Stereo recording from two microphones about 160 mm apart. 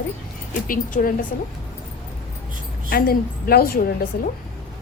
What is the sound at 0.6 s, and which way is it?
Speech, 60° left (ahead or behind).